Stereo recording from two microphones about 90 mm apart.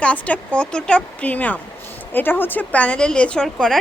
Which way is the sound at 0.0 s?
15° left (ahead or behind).